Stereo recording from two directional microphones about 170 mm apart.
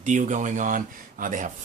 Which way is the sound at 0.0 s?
45° right (ahead or behind).